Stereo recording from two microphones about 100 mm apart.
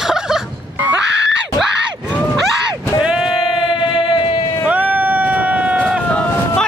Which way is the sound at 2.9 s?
10° right (ahead or behind).